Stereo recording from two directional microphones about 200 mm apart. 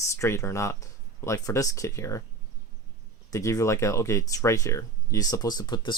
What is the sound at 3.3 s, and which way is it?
Speech, 15° left (ahead or behind).